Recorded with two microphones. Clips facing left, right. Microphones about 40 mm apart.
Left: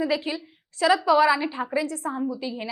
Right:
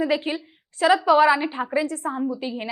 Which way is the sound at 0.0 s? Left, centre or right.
Right.